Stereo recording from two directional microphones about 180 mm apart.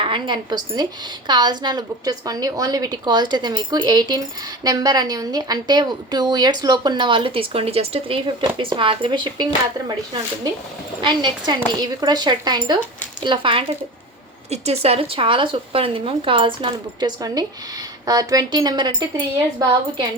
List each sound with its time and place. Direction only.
0.0 s a woman's voice: 25° right (ahead or behind)
11.0 s a woman's voice: 25° right (ahead or behind)